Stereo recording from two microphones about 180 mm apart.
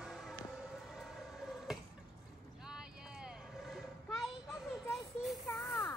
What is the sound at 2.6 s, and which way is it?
Vehicle, 5° right (ahead or behind).